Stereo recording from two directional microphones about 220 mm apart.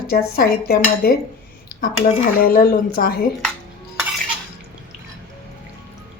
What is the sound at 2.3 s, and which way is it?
Speech, 40° left (ahead or behind).